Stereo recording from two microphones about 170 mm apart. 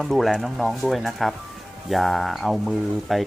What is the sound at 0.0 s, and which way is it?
Speech, centre (ahead or behind).